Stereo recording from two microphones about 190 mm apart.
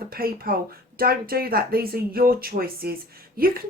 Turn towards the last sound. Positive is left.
turn(degrees=-50)  # may be behind; listen again after turning